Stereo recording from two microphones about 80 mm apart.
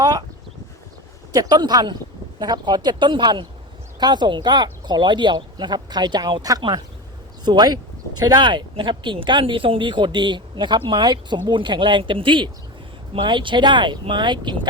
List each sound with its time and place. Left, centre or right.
0.0 s a sound: right
1.3 s speech: right
8.4 s speech: right
11.5 s speech: right